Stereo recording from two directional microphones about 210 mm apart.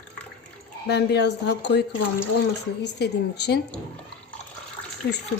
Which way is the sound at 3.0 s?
50° left (ahead or behind).